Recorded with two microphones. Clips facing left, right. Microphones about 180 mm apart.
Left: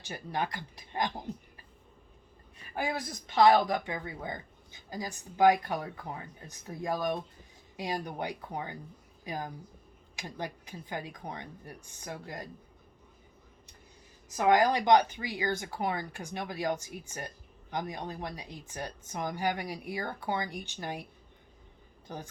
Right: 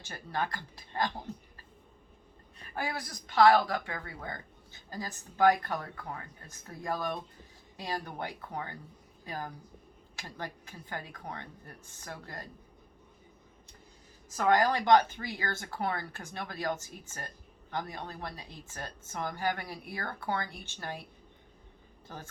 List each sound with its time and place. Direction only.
0.0 s speech: 15° left (ahead or behind)
2.7 s speech: 20° left (ahead or behind)
14.3 s speech: 15° left (ahead or behind)